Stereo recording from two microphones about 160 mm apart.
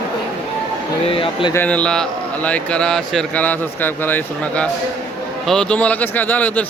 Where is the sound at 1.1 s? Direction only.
35° left (ahead or behind).